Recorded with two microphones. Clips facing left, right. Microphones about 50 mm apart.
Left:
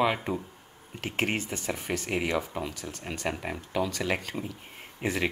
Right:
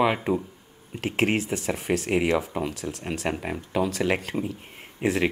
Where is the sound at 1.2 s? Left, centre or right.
Centre.